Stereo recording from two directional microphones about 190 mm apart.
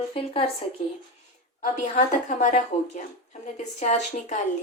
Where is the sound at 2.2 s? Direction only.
40° left (ahead or behind).